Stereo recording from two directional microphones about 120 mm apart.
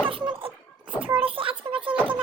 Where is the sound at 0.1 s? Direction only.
45° right (ahead or behind).